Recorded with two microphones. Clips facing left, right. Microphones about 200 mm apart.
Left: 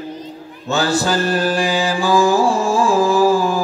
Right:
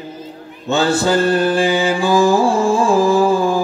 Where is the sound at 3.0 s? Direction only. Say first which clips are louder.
Right 1 dB; 20° right (ahead or behind).